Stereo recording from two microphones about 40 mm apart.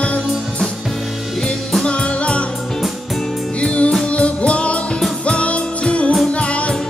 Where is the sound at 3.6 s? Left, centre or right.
Left.